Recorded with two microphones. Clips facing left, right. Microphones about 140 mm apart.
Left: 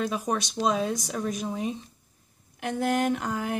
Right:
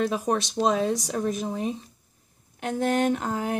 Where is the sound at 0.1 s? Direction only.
Centre (ahead or behind).